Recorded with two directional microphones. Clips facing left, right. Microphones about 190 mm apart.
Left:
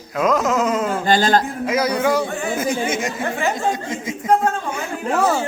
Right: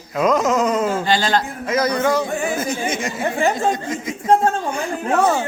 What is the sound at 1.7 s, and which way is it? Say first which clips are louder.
A woman's voice: right 2 dB; 10° left (ahead or behind).